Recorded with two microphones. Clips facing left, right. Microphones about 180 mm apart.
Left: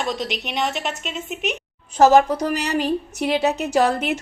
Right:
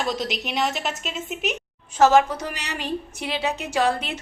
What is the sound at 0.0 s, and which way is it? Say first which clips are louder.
A woman's voice: left 1 dB; centre (ahead or behind).